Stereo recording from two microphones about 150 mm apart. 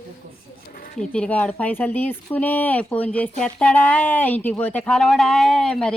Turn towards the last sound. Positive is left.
turn(degrees=5)  # may be behind; listen again after turning